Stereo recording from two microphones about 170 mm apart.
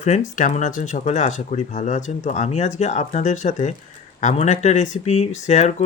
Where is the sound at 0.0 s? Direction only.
45° left (ahead or behind).